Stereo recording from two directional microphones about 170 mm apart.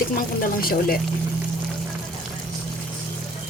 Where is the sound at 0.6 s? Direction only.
60° left (ahead or behind).